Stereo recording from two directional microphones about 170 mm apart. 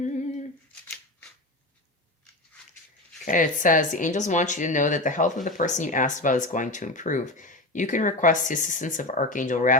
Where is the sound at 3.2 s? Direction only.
50° left (ahead or behind).